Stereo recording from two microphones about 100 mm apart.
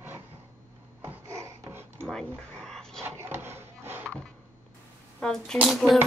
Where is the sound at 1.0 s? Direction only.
30° right (ahead or behind).